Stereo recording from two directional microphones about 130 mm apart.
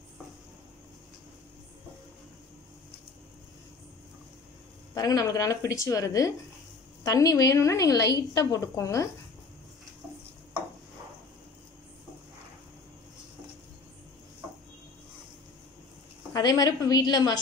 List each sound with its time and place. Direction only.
4.9 s a woman's voice: 30° left (ahead or behind)
16.3 s a woman's voice: 30° left (ahead or behind)